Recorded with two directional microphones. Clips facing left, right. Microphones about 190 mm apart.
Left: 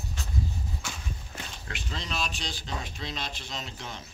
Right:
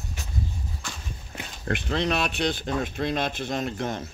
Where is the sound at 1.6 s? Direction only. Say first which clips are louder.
Right 15 dB; 55° right (ahead or behind).